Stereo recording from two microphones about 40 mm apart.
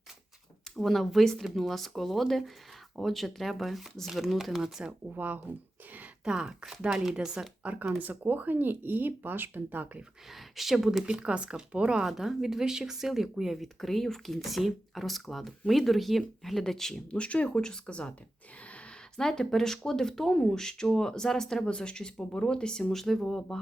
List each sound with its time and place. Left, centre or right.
0.8 s speech: centre
4.9 s speech: right
6.2 s speech: centre
7.0 s speech: centre
7.6 s speech: right
10.6 s speech: centre
11.0 s speech: right
12.0 s speech: centre
17.1 s speech: left
17.6 s speech: left
19.1 s speech: centre